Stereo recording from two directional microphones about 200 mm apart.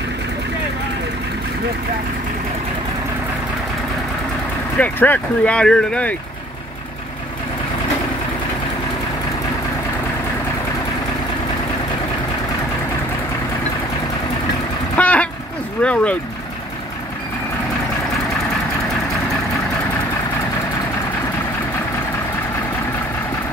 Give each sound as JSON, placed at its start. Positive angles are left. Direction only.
{"t": 4.7, "sound": "speech", "side_deg": 10}
{"t": 15.0, "sound": "a sound", "side_deg": 5}
{"t": 15.8, "sound": "speech", "side_deg": 5}